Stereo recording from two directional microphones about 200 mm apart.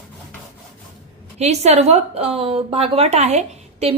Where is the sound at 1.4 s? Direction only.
35° right (ahead or behind).